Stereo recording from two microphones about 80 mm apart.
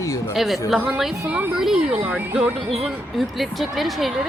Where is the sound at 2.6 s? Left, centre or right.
Centre.